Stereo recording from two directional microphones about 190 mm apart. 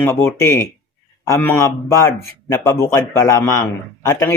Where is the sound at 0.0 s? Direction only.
15° left (ahead or behind).